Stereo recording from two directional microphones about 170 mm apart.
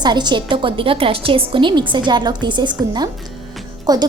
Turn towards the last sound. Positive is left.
turn(degrees=-20)  # may be behind; listen again after turning